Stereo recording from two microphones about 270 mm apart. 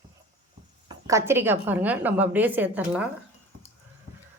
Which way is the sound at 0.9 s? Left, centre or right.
Centre.